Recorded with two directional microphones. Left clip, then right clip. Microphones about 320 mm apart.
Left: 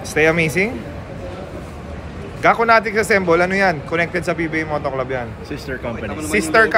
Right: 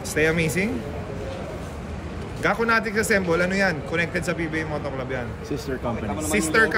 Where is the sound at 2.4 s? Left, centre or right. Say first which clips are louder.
Left 8 dB; centre.